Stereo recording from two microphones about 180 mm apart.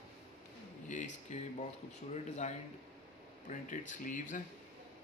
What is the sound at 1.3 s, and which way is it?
Speech, 40° left (ahead or behind).